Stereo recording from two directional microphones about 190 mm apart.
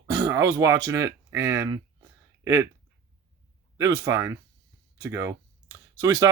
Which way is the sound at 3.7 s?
15° right (ahead or behind).